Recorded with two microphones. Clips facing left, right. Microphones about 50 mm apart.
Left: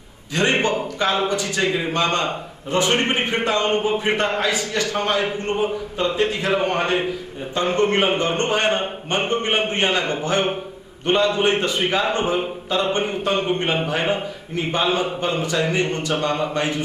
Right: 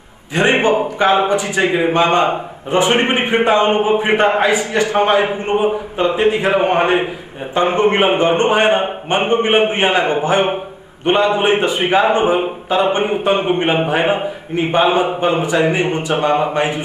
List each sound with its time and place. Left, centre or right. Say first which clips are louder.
0.3 s a man's voice: right 6 dB; right